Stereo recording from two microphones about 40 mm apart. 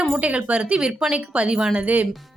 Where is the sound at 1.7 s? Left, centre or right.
Right.